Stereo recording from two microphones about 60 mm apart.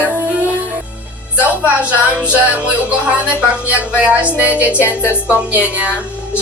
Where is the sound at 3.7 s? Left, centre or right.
Right.